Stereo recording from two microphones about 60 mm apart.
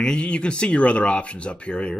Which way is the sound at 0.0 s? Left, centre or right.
Centre.